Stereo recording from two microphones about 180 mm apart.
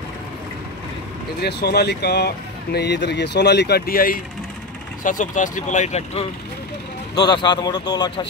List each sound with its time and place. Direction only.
1.4 s speech: 65° left (ahead or behind); by 6.2 s 35° left (ahead or behind)
7.2 s speech: 25° left (ahead or behind)